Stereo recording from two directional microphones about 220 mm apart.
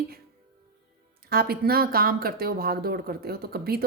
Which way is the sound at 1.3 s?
45° right (ahead or behind).